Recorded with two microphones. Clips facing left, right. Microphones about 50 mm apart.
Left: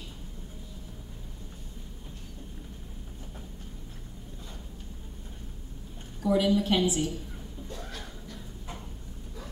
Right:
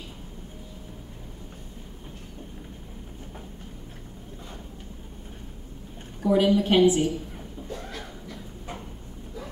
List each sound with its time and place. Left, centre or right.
6.2 s a woman's voice: right